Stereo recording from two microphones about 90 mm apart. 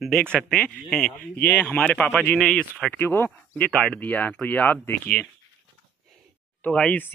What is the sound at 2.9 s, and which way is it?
Speech, 25° left (ahead or behind).